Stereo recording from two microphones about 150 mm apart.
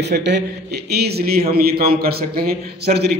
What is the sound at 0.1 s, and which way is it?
A man's voice, 90° right.